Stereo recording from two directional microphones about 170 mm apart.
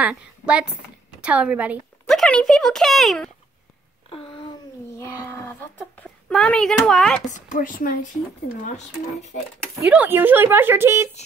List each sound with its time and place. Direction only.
0.0 s a woman's voice: 5° right (ahead or behind)
2.0 s speech: 5° left (ahead or behind)
6.2 s speech: 5° left (ahead or behind)
7.2 s speech: 50° left (ahead or behind)
9.8 s speech: 10° right (ahead or behind)